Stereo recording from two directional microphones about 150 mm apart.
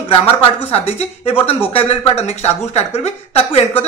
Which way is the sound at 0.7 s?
40° left (ahead or behind).